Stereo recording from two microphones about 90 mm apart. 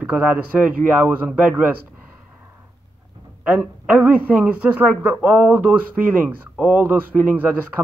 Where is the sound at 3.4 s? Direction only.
20° right (ahead or behind).